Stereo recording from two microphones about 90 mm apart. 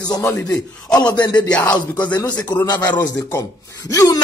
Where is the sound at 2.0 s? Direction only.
50° left (ahead or behind).